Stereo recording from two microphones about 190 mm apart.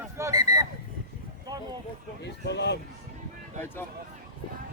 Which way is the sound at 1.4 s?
20° right (ahead or behind).